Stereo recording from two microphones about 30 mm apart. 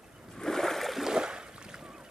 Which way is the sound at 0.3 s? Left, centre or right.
Centre.